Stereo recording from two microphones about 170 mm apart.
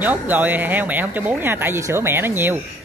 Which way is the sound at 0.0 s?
10° right (ahead or behind).